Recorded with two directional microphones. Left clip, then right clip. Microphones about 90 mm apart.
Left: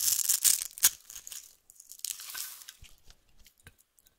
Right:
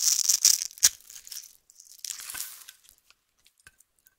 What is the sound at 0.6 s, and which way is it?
Music, 30° left (ahead or behind).